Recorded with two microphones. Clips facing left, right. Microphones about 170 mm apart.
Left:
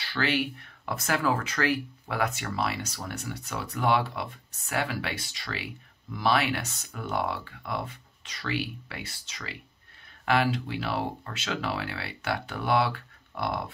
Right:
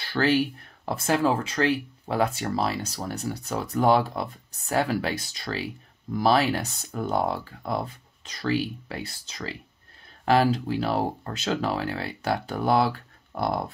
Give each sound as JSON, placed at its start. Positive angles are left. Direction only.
{"t": 0.0, "sound": "speech", "side_deg": -40}